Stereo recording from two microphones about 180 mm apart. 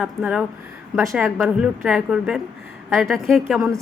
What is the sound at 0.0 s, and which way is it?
A woman's voice, 5° right (ahead or behind).